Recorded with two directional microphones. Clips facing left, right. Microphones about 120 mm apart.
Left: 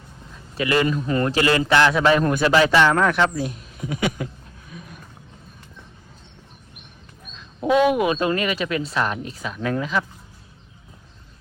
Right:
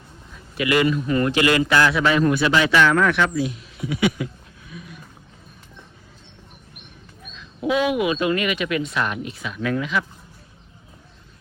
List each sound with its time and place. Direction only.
0.5 s speech: 35° left (ahead or behind)
2.7 s speech: 25° left (ahead or behind)
3.3 s speech: 45° left (ahead or behind)
7.6 s speech: 40° left (ahead or behind)